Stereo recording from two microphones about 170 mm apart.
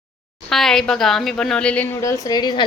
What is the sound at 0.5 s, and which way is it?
A woman's voice, centre (ahead or behind).